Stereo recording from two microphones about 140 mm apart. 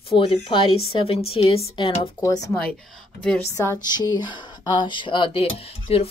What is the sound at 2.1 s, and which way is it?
Speech, 25° left (ahead or behind).